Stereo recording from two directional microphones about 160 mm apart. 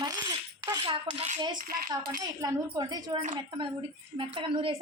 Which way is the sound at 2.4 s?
25° right (ahead or behind).